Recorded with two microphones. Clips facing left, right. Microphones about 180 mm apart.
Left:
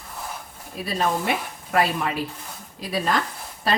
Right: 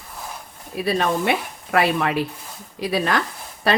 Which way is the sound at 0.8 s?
70° right (ahead or behind).